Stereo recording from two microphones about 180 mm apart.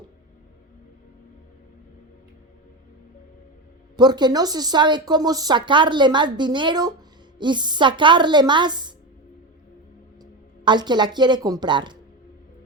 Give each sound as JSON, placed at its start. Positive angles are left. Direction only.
{"t": 3.9, "sound": "speech", "side_deg": -25}
{"t": 10.7, "sound": "speech", "side_deg": -25}